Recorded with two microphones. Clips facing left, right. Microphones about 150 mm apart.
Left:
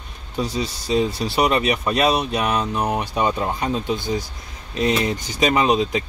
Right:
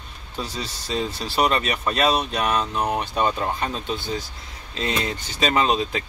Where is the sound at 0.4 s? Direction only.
15° left (ahead or behind).